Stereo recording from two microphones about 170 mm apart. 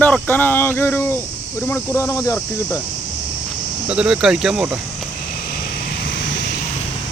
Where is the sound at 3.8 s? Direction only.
5° right (ahead or behind).